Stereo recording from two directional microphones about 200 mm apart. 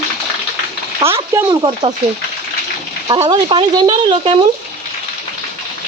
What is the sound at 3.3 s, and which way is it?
Speech, 20° right (ahead or behind).